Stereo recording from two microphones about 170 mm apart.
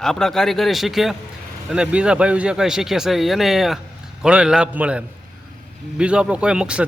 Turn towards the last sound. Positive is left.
turn(degrees=-5)  # may be behind; listen again after turning